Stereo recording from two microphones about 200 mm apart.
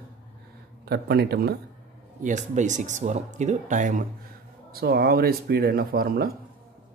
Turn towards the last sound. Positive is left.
turn(degrees=-50)  # may be behind; listen again after turning